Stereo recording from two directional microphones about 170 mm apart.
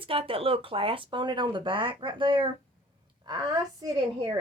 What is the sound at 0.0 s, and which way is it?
Speech, 30° right (ahead or behind).